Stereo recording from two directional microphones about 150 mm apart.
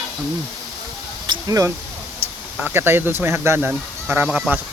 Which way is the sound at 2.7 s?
15° right (ahead or behind).